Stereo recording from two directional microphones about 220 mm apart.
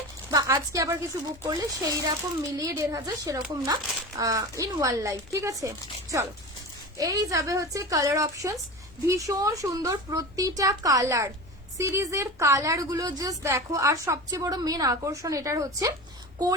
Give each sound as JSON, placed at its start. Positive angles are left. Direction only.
{"t": 0.3, "sound": "a woman's voice", "side_deg": -15}